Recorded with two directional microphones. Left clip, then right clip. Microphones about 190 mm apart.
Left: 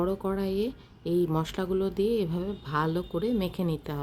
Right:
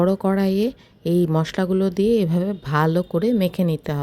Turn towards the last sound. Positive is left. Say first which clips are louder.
# right 8 dB
turn(degrees=-35)  # may be behind; listen again after turning